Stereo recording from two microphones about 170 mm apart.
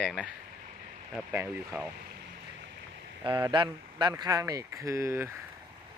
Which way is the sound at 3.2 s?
25° right (ahead or behind).